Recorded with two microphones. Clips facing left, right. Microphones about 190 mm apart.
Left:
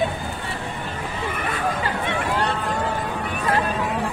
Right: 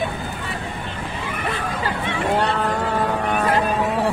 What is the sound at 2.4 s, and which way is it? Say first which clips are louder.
Vehicle: right 3 dB; 65° right (ahead or behind).